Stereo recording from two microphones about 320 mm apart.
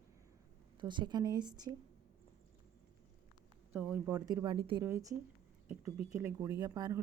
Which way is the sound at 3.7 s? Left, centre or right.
Centre.